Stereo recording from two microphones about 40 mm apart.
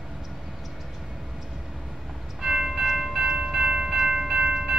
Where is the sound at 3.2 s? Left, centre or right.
Right.